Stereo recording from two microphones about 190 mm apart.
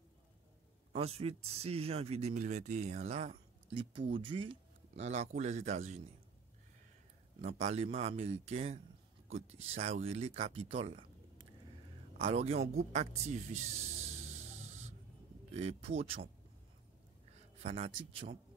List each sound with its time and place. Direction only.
0.9 s speech: 30° right (ahead or behind)
7.4 s speech: 35° right (ahead or behind)
15.5 s speech: 35° right (ahead or behind)
17.3 s a man's voice: 35° right (ahead or behind)